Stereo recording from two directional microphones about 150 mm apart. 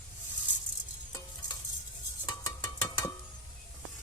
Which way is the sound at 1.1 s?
25° left (ahead or behind).